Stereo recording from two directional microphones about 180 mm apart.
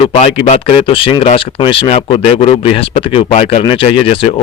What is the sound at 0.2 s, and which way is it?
Speech, 35° left (ahead or behind).